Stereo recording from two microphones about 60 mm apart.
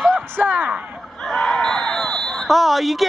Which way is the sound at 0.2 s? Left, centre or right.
Right.